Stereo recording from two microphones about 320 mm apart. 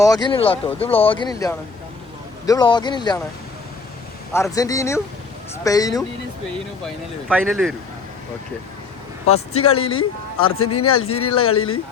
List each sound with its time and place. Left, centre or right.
0.0 s speech: centre
4.3 s speech: centre
6.8 s speech: centre
9.6 s speech: left